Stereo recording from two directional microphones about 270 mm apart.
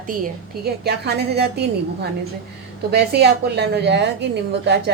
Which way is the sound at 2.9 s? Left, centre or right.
Right.